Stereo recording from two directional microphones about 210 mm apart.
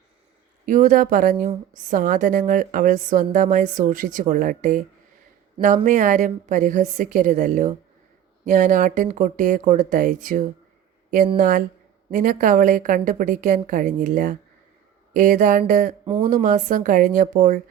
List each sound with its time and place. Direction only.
0.6 s speech: 40° right (ahead or behind)